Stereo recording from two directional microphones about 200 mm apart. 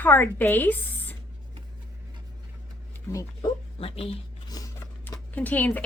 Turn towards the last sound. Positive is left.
turn(degrees=10)  # may be behind; listen again after turning